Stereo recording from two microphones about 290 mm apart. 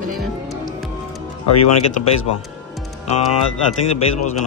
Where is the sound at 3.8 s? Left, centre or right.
Left.